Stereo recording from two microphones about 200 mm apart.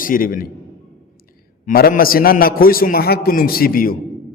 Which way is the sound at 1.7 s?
45° left (ahead or behind).